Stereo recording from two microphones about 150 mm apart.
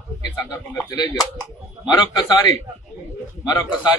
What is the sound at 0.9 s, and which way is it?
A man's voice, 25° left (ahead or behind).